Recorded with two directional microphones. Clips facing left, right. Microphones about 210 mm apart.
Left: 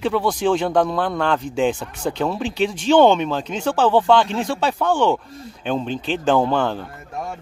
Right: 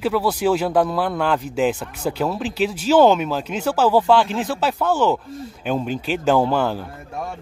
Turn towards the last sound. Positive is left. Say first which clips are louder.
# even
turn(degrees=-5)  # may be behind; listen again after turning